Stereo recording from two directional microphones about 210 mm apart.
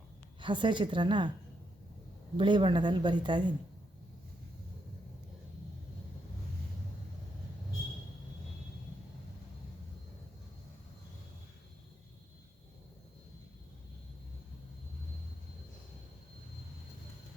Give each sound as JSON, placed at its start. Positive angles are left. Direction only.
{"t": 0.3, "sound": "speech", "side_deg": -25}
{"t": 2.4, "sound": "speech", "side_deg": -25}